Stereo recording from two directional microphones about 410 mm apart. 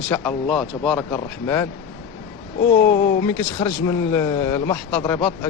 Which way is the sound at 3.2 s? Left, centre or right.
Centre.